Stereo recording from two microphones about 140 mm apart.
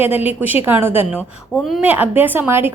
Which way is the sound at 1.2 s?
5° left (ahead or behind).